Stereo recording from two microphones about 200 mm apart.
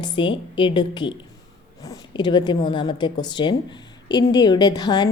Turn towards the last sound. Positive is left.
turn(degrees=20)  # may be behind; listen again after turning